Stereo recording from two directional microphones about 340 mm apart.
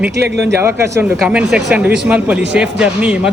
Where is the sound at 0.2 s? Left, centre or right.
Right.